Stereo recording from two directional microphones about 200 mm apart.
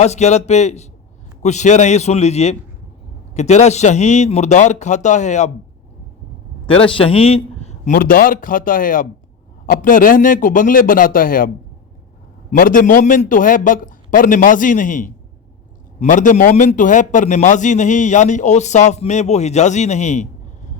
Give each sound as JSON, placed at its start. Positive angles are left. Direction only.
{"t": 0.0, "sound": "a man's voice", "side_deg": 35}
{"t": 6.7, "sound": "a man's voice", "side_deg": 25}
{"t": 7.9, "sound": "a man's voice", "side_deg": 45}